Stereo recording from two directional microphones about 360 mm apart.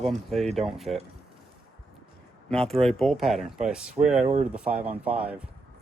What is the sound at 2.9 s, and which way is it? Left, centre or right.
Speech, centre.